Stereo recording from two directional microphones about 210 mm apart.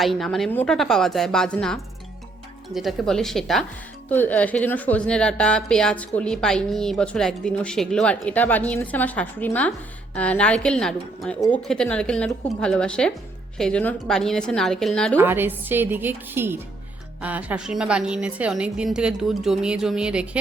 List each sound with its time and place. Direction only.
0.0 s a woman's voice: centre (ahead or behind)
15.2 s a woman's voice: 10° right (ahead or behind)